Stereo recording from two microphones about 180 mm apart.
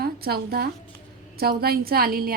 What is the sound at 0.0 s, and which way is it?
A woman's voice, 60° right (ahead or behind).